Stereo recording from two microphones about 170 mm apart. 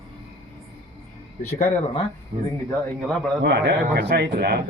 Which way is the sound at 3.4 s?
80° right.